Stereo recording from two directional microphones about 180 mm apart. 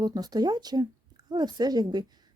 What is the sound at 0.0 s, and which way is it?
Speech, 20° right (ahead or behind).